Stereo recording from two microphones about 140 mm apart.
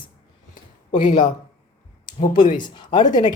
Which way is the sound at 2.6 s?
35° left (ahead or behind).